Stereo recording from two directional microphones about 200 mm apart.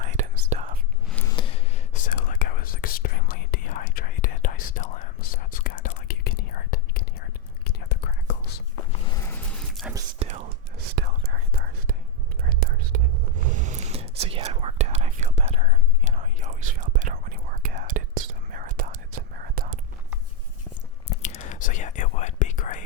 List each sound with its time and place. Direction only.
0.0 s whispering: 40° right (ahead or behind)
1.1 s scissors: 15° left (ahead or behind)
1.4 s whispering: 30° left (ahead or behind); by 8.5 s 55° left (ahead or behind)
8.9 s a sound: 20° left (ahead or behind); by 9.9 s centre (ahead or behind)
10.2 s whispering: 35° right (ahead or behind)
10.9 s whispering: 50° right (ahead or behind)
21.1 s whispering: 35° left (ahead or behind)